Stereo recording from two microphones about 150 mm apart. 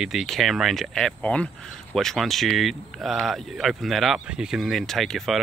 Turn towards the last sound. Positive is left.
turn(degrees=0)  # may be behind; listen again after turning